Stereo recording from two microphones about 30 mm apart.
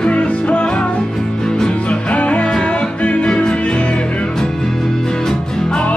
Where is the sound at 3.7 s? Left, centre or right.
Left.